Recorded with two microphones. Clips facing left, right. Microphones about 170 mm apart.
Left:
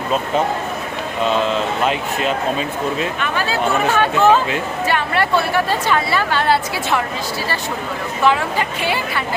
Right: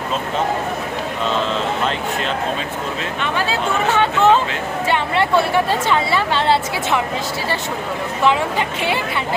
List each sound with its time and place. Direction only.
3.3 s a woman's voice: 25° right (ahead or behind)
8.2 s a woman's voice: 20° right (ahead or behind)